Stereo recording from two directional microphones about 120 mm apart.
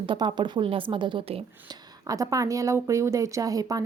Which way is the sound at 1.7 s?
30° right (ahead or behind).